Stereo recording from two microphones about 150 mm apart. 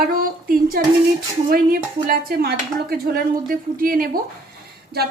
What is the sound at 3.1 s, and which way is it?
A woman's voice, 70° right (ahead or behind).